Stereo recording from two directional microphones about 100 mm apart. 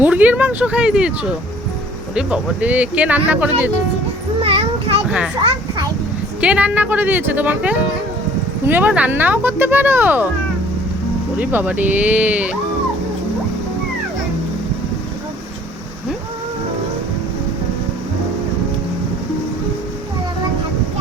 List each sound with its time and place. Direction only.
0.0 s speech: 15° right (ahead or behind)
5.0 s a child's voice: 10° right (ahead or behind)
6.4 s speech: 10° right (ahead or behind)
11.3 s speech: 15° right (ahead or behind)